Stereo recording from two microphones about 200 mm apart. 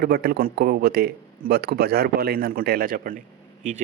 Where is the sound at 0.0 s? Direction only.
50° right (ahead or behind).